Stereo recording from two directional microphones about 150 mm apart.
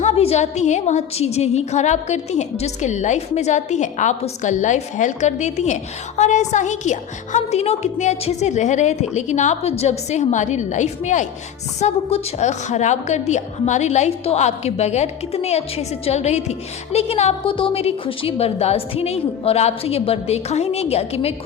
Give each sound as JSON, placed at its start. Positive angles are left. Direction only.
{"t": 0.0, "sound": "a woman's voice", "side_deg": 45}